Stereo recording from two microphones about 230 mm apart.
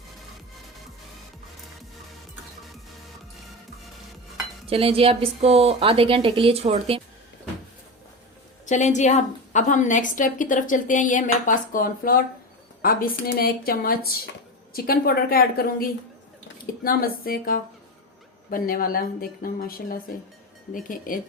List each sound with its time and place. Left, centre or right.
4.7 s a woman's voice: right
8.7 s a woman's voice: left